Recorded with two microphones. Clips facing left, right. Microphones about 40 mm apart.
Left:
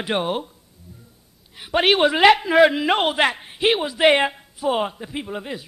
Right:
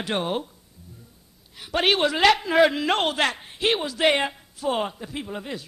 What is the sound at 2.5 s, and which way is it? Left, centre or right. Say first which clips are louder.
A man's voice: left 4 dB; centre.